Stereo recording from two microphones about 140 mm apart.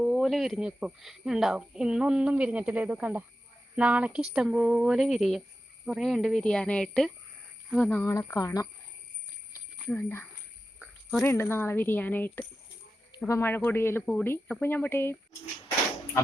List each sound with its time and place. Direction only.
0.0 s speech: centre (ahead or behind); by 8.6 s 20° left (ahead or behind)
9.9 s speech: 15° left (ahead or behind)